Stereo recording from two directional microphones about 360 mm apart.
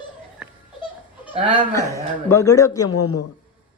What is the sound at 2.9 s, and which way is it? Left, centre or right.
Speech, left.